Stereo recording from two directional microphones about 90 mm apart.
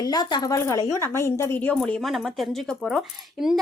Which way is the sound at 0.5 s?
35° left (ahead or behind).